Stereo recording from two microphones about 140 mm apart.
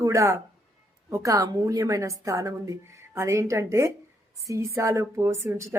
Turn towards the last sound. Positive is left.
turn(degrees=-20)  # may be behind; listen again after turning